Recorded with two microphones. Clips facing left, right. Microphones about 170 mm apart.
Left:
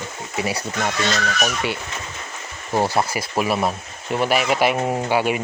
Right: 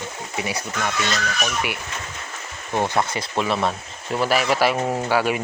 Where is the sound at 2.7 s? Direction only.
10° left (ahead or behind).